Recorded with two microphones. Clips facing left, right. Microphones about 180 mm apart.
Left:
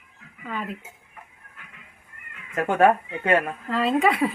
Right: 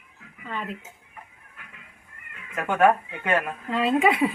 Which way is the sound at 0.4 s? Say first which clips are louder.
Left 1 dB; 5° left (ahead or behind).